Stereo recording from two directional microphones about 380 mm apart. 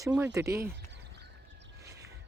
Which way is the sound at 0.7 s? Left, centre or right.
Right.